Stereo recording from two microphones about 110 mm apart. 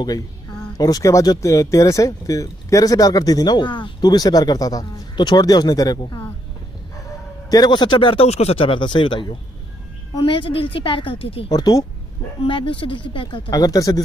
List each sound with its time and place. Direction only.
0.0 s speech: 35° left (ahead or behind)
7.4 s a woman's voice: 35° left (ahead or behind)
8.3 s a woman's voice: 70° left (ahead or behind)
11.5 s speech: 35° left (ahead or behind)
12.4 s a woman's voice: 50° left (ahead or behind)
13.5 s speech: 35° left (ahead or behind)